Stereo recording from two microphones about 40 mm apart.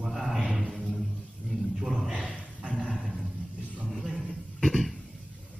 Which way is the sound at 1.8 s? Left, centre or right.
Centre.